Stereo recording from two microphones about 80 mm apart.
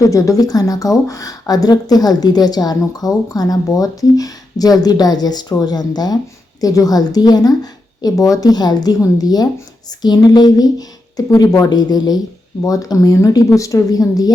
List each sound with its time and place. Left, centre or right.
0.0 s speech: left
11.3 s speech: left
11.7 s speech: left